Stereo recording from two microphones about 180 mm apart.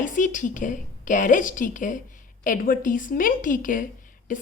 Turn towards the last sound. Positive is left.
turn(degrees=45)  # may be behind; listen again after turning